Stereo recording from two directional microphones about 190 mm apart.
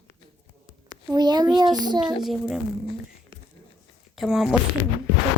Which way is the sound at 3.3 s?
25° right (ahead or behind).